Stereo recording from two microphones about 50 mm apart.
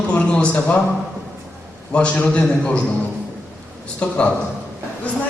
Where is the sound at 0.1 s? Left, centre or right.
Left.